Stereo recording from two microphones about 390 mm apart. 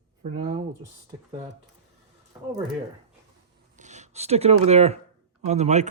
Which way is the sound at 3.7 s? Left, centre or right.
Centre.